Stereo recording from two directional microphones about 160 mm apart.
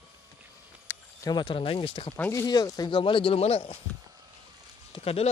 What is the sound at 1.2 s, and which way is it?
Speech, 30° left (ahead or behind).